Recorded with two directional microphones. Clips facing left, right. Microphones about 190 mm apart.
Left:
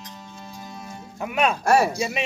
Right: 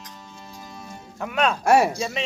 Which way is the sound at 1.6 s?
20° right (ahead or behind).